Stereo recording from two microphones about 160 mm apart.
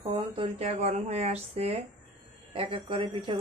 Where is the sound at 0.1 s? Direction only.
35° right (ahead or behind).